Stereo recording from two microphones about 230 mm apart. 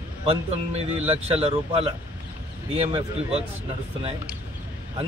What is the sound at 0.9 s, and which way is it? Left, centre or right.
Speech, right.